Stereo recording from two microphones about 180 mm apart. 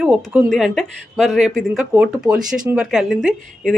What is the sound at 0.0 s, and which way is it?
Speech, 5° right (ahead or behind).